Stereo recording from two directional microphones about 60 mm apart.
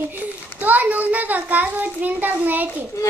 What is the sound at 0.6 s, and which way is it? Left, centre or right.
A child's voice, right.